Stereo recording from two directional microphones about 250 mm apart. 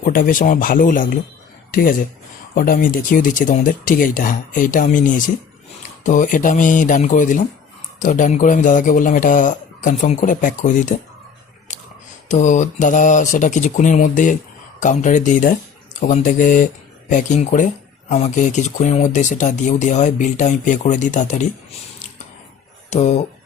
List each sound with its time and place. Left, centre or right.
0.0 s a man's voice: left
11.7 s a sound: left
12.3 s a man's voice: left
22.9 s speech: left